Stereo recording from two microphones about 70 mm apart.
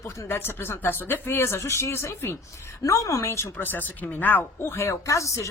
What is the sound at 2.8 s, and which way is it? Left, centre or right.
Speech, left.